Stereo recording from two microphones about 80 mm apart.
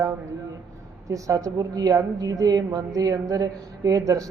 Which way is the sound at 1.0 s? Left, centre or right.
Right.